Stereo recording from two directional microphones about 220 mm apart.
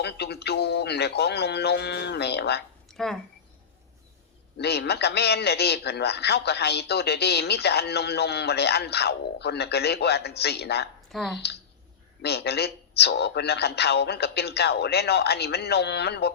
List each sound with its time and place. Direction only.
0.0 s a man's voice: 50° left (ahead or behind)
2.9 s speech: centre (ahead or behind)
4.5 s a man's voice: 45° left (ahead or behind)
11.1 s speech: centre (ahead or behind)
12.2 s a man's voice: 50° left (ahead or behind)